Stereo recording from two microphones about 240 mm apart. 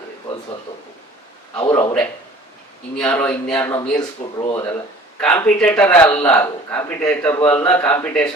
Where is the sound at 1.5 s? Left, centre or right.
Centre.